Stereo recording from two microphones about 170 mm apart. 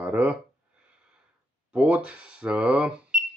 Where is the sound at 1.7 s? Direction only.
5° right (ahead or behind).